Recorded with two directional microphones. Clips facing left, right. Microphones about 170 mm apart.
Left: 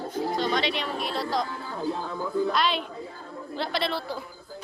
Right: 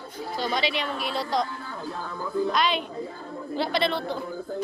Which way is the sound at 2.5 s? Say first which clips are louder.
Right 1 dB; centre (ahead or behind).